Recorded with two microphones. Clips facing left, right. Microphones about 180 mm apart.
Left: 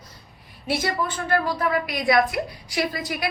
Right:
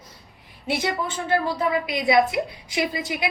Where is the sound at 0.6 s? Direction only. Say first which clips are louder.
Even; 20° right (ahead or behind).